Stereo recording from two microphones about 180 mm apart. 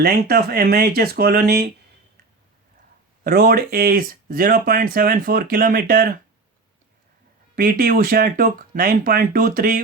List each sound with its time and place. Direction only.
0.0 s speech: 60° right (ahead or behind)
3.2 s speech: 60° right (ahead or behind)
7.5 s speech: 55° right (ahead or behind)